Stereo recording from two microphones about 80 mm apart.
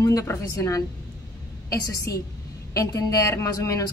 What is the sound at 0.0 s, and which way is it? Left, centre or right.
A woman's voice, left.